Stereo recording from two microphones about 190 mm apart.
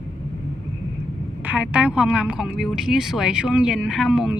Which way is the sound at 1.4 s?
5° right (ahead or behind).